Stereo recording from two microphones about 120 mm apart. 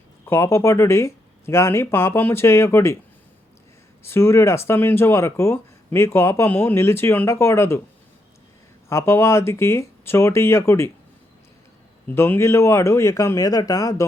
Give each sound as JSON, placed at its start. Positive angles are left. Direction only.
{"t": 0.3, "sound": "speech", "side_deg": 20}
{"t": 4.0, "sound": "speech", "side_deg": 20}
{"t": 8.9, "sound": "speech", "side_deg": 20}
{"t": 12.0, "sound": "speech", "side_deg": 15}